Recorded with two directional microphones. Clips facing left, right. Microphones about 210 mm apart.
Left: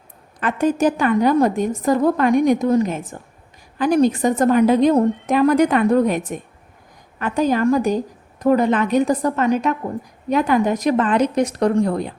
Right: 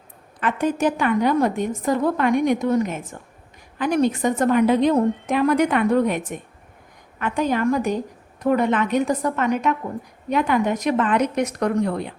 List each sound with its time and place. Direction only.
0.3 s a woman's voice: 40° left (ahead or behind)
7.2 s a woman's voice: 35° left (ahead or behind)